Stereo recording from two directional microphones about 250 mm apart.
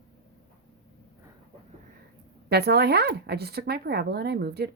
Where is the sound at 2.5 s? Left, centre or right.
Right.